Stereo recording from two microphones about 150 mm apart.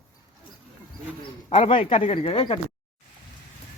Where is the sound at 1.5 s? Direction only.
45° left (ahead or behind).